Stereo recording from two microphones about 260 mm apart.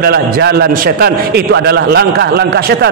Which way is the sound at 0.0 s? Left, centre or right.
Right.